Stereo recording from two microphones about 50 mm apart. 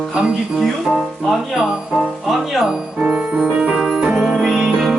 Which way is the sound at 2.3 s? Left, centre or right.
Centre.